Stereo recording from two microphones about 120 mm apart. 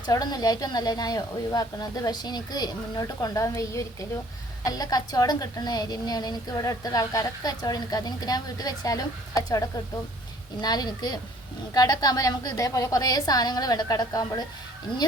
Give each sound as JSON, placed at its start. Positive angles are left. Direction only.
{"t": 0.0, "sound": "a woman's voice", "side_deg": 35}